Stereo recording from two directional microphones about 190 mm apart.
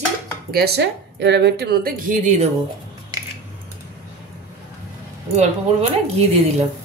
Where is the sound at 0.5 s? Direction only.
60° right (ahead or behind); by 2.5 s 40° right (ahead or behind).